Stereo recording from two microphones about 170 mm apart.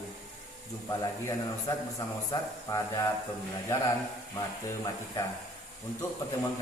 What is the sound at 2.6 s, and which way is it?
Speech, 20° left (ahead or behind).